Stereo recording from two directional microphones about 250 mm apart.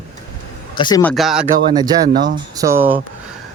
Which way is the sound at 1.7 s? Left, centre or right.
Centre.